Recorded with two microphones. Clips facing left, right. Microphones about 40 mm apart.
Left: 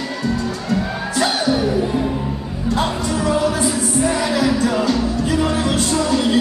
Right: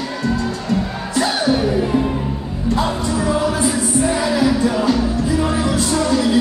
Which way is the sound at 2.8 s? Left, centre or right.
Left.